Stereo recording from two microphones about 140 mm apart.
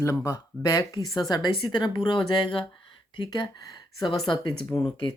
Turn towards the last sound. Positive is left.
turn(degrees=35)  # may be behind; listen again after turning